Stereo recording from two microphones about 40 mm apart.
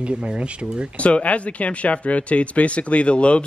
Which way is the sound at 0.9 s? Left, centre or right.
Left.